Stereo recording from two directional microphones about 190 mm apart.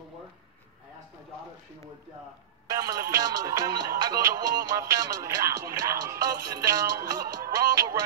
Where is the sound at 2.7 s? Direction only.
20° right (ahead or behind).